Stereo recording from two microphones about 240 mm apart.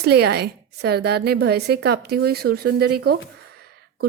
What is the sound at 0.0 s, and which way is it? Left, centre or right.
A woman's voice, right.